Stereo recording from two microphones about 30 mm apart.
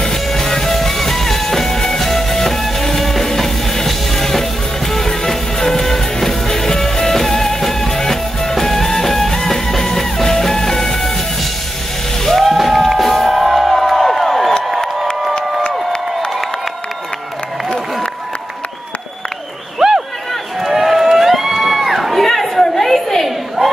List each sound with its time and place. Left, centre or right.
0.0 s music: centre
12.4 s music: centre
13.5 s crowd: centre
19.8 s a sound: centre
20.6 s crowd: centre
22.2 s chatter: centre
23.6 s battle cry: centre